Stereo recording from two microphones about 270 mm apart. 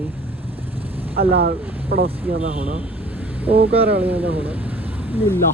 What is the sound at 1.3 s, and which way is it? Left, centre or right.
Speech, right.